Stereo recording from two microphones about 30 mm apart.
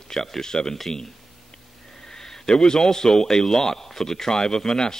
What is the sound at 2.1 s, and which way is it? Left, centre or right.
A man's voice, centre.